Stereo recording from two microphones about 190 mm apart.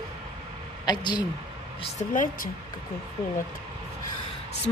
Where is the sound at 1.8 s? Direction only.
40° left (ahead or behind).